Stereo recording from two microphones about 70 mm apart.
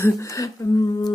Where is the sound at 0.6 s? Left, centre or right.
Left.